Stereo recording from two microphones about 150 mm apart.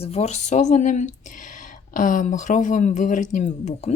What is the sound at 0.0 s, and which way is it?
A woman's voice, 45° left (ahead or behind).